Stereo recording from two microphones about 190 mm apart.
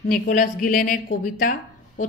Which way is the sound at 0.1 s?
45° left (ahead or behind).